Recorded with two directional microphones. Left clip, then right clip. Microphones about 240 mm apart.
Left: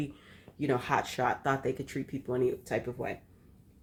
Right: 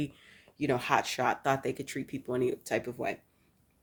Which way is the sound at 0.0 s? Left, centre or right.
Right.